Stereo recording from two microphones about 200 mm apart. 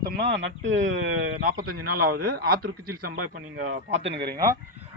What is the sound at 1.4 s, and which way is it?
A man's voice, 45° right (ahead or behind).